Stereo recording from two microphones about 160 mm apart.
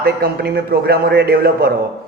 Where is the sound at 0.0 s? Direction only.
75° right (ahead or behind).